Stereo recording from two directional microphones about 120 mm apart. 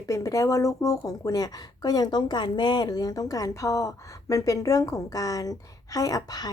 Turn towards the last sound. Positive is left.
turn(degrees=30)  # may be behind; listen again after turning